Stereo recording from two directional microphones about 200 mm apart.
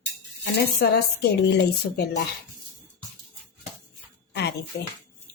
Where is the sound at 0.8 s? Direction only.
55° left (ahead or behind).